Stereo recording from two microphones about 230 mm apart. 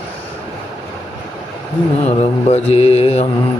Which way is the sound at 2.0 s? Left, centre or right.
Left.